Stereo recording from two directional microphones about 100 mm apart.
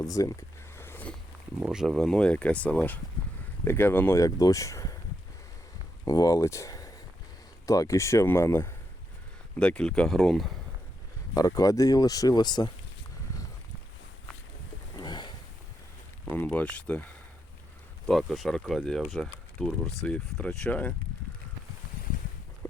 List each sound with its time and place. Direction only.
0.0 s a sound: 35° left (ahead or behind)
1.5 s speech: 5° right (ahead or behind); by 4.2 s 20° left (ahead or behind)
4.2 s speech: 35° left (ahead or behind)
6.1 s speech: 35° left (ahead or behind)
9.6 s speech: 10° left (ahead or behind)
11.3 s speech: 35° left (ahead or behind)
14.9 s a sound: 45° left (ahead or behind)
16.3 s speech: 15° left (ahead or behind)
18.0 s speech: centre (ahead or behind)